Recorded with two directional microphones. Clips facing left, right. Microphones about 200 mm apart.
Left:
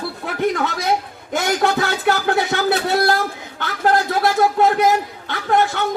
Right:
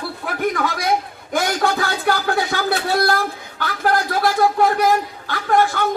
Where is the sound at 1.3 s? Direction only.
20° left (ahead or behind).